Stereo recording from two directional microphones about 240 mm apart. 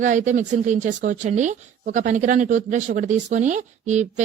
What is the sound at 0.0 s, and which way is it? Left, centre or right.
A woman's voice, right.